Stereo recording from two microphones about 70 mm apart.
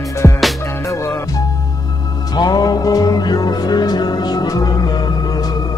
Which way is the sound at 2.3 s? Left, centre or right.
Left.